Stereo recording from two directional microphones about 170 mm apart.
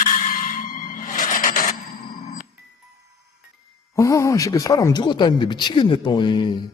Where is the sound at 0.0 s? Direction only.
50° left (ahead or behind).